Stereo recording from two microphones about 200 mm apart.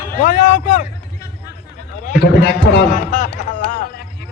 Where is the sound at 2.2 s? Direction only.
55° left (ahead or behind).